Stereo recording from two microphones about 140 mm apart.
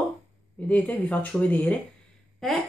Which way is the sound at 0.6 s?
10° left (ahead or behind).